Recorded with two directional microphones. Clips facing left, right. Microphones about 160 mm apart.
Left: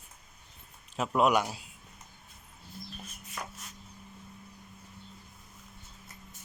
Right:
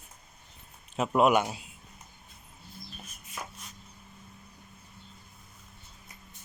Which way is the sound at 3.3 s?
5° right (ahead or behind).